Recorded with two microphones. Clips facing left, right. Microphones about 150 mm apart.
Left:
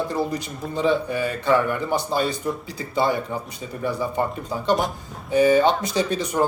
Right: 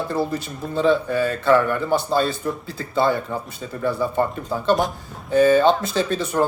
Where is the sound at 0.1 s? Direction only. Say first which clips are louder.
Right 1 dB; 15° left (ahead or behind).